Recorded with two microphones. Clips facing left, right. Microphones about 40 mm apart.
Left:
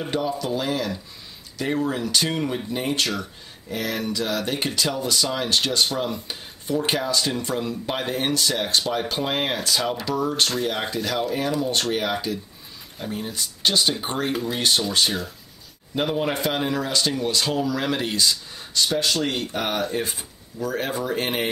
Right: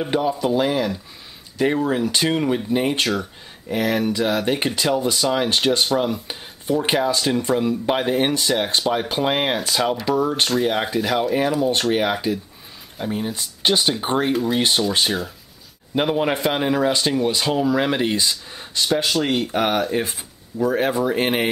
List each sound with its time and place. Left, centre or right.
0.1 s speech: centre
10.5 s speech: centre